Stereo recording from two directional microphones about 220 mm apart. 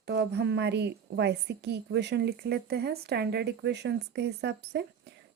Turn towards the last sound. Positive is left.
turn(degrees=-50)  # may be behind; listen again after turning